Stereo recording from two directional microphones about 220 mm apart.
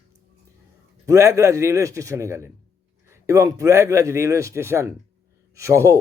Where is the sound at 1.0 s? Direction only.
15° right (ahead or behind).